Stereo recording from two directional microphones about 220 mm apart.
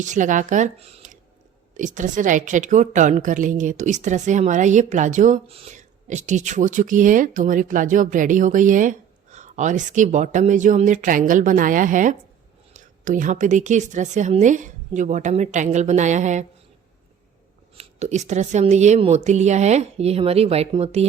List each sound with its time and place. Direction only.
0.0 s a woman's voice: 35° right (ahead or behind)
17.7 s a woman's voice: 30° right (ahead or behind)